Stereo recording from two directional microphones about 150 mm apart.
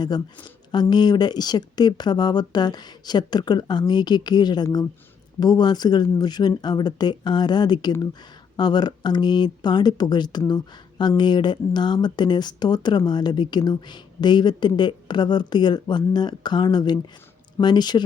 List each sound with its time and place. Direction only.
0.7 s speech: 30° left (ahead or behind)